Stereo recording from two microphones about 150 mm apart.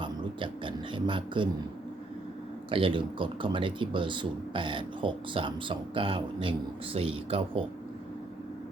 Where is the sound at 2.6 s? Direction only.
35° right (ahead or behind).